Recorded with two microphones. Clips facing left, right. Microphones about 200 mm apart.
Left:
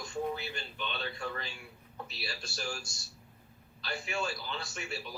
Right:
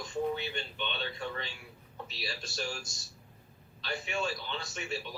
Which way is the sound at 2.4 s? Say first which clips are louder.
Right 1 dB; centre (ahead or behind).